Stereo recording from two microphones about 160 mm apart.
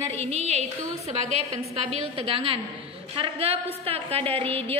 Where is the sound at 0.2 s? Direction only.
40° right (ahead or behind).